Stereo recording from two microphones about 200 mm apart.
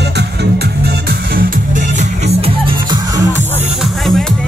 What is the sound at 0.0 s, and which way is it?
Music, 55° right (ahead or behind).